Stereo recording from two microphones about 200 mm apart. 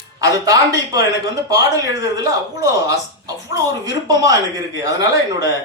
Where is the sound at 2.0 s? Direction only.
15° right (ahead or behind).